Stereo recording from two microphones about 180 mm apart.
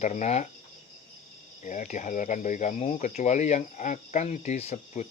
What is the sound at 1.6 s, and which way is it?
Speech, 45° left (ahead or behind).